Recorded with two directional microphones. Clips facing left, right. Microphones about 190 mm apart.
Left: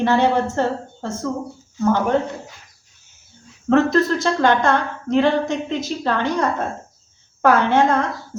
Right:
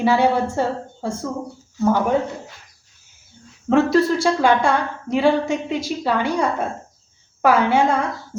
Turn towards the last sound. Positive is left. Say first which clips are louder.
# left 1 dB
turn(degrees=-10)  # may be behind; listen again after turning